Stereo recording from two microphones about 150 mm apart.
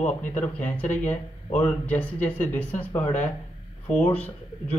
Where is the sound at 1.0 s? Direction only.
50° left (ahead or behind).